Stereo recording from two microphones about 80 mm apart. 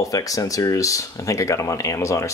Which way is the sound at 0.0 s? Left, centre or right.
Left.